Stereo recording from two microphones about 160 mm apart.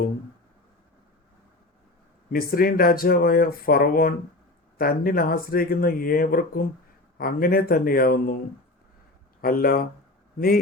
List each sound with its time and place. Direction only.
2.3 s speech: 65° left (ahead or behind)
9.4 s speech: 65° left (ahead or behind)